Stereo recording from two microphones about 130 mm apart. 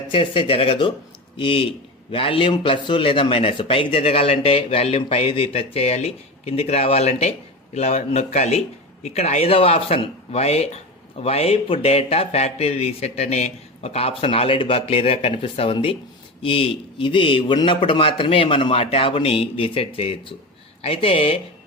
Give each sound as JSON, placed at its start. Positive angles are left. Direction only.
{"t": 0.1, "sound": "a man's voice", "side_deg": 45}